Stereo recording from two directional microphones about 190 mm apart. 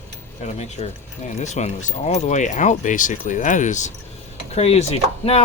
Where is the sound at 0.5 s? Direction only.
35° left (ahead or behind).